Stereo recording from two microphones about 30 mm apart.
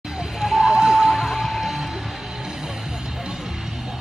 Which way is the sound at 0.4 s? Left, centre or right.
Centre.